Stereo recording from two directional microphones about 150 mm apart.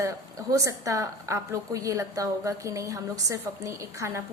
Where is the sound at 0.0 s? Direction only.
20° right (ahead or behind).